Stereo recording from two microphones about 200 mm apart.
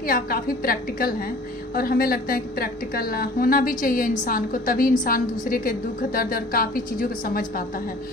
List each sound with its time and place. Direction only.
0.0 s a woman's voice: 45° left (ahead or behind)